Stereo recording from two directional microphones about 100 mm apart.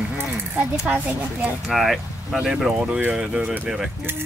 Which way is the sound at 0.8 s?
15° right (ahead or behind).